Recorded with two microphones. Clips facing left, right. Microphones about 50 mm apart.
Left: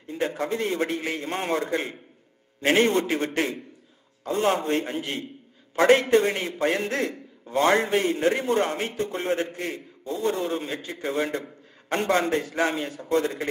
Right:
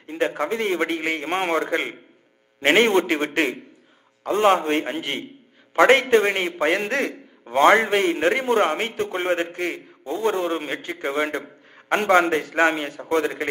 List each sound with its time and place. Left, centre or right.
0.0 s a man's voice: right